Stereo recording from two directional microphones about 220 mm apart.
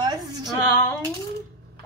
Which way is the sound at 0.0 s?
20° right (ahead or behind).